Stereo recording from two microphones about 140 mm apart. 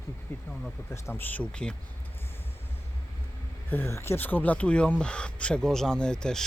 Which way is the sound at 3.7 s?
15° left (ahead or behind).